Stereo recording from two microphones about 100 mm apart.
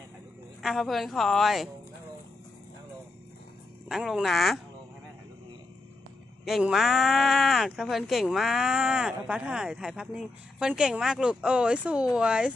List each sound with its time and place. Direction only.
0.6 s speech: centre (ahead or behind)
3.8 s speech: 5° right (ahead or behind)
6.6 s speech: 5° right (ahead or behind)